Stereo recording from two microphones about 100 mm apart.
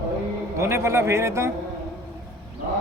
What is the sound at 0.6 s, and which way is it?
Speech, 25° right (ahead or behind).